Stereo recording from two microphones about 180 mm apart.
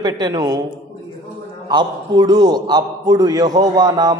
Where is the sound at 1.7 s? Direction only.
25° right (ahead or behind).